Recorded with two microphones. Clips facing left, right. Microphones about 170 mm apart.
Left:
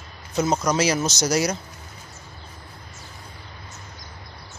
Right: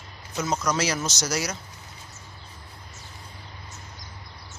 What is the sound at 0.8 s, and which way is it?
Speech, 15° left (ahead or behind).